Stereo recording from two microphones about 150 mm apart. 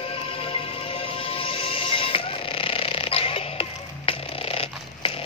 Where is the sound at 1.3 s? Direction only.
35° left (ahead or behind).